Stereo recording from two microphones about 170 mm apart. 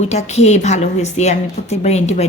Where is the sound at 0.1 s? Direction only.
40° left (ahead or behind).